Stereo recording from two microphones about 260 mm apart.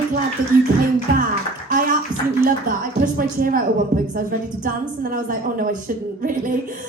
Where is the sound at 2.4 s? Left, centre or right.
Right.